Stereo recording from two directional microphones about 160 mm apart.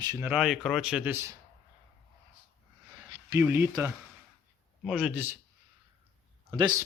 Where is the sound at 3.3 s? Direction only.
15° right (ahead or behind).